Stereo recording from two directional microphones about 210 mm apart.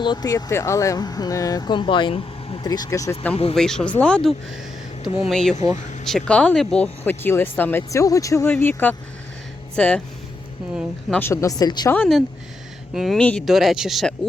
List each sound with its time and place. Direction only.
0.0 s speech: 20° left (ahead or behind)
3.5 s speech: 5° left (ahead or behind)
11.2 s speech: 15° left (ahead or behind)
11.9 s speech: centre (ahead or behind)